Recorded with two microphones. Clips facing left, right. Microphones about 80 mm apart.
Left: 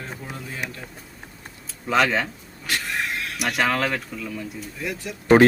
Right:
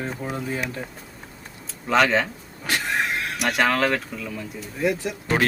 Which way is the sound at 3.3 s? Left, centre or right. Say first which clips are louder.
Right 1 dB; centre.